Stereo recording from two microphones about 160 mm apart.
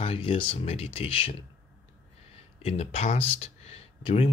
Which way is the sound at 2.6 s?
40° left (ahead or behind).